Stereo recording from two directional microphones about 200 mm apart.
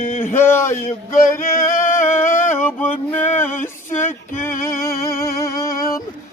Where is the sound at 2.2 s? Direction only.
40° left (ahead or behind).